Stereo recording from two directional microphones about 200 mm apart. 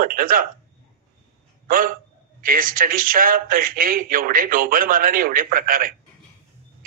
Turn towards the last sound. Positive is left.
turn(degrees=-45)  # may be behind; listen again after turning